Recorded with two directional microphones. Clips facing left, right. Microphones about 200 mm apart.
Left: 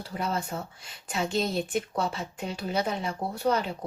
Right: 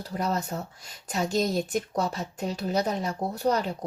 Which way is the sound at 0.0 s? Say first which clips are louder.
Right 2 dB; 40° right (ahead or behind).